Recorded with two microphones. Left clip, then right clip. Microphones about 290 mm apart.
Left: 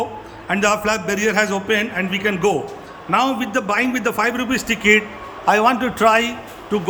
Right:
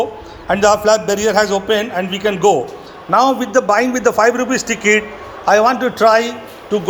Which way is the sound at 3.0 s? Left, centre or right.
Left.